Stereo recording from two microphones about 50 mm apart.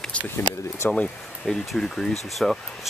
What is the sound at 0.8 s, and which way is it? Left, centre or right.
Speech, left.